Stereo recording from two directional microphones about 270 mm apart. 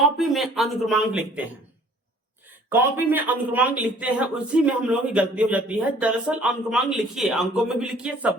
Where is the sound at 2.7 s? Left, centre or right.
Centre.